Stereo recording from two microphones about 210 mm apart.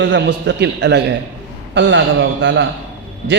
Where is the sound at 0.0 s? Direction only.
55° right (ahead or behind).